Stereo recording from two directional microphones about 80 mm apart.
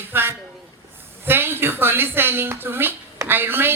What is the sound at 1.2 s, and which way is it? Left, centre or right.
A woman's voice, right.